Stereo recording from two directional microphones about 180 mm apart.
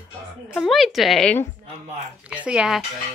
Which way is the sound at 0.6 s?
Centre (ahead or behind).